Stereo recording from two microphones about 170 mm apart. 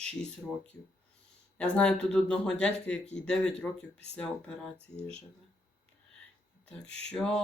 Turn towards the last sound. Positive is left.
turn(degrees=5)  # may be behind; listen again after turning